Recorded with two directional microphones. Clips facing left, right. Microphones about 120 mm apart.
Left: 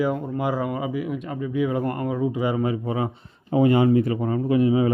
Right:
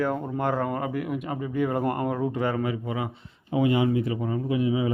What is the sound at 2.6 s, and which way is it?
Speech, 30° left (ahead or behind).